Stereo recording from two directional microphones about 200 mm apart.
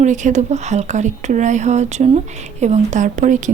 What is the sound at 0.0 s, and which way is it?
Speech, 40° right (ahead or behind).